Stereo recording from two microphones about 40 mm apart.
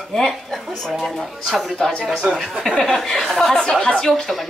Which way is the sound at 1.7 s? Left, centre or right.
Centre.